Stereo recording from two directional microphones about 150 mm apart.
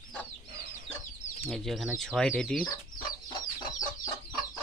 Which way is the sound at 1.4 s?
Centre (ahead or behind).